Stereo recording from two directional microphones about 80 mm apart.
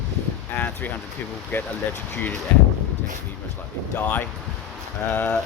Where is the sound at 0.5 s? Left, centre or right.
Left.